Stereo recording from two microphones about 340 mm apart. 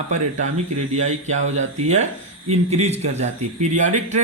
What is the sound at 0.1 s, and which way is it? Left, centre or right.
Speech, right.